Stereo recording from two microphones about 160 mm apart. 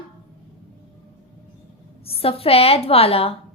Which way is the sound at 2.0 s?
35° left (ahead or behind).